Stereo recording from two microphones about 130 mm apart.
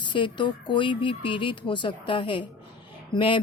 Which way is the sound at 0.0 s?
40° left (ahead or behind).